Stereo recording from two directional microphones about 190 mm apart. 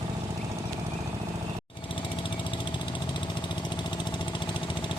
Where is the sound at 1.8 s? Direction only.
25° left (ahead or behind).